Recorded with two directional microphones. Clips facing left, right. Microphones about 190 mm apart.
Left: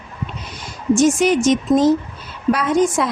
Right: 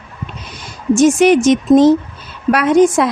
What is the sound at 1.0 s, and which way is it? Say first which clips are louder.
A woman's voice: right 6 dB; 70° right (ahead or behind).